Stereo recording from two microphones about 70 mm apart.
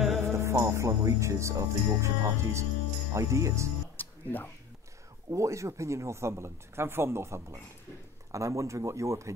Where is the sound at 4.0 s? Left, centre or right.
Left.